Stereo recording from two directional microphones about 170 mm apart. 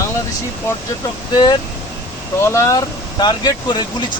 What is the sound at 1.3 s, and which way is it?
Speech, 25° left (ahead or behind).